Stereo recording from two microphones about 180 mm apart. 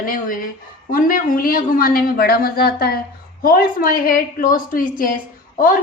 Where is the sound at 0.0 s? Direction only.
50° left (ahead or behind).